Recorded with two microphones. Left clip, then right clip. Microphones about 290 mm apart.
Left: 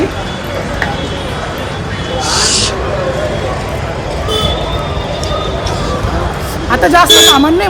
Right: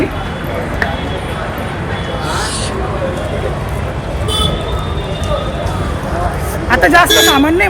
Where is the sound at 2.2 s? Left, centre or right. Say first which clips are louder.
Left 8 dB; centre.